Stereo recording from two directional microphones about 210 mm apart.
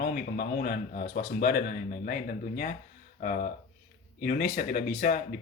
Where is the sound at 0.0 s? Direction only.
45° left (ahead or behind).